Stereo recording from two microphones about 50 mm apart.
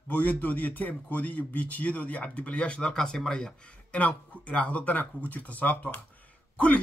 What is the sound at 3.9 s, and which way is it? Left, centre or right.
Speech, left.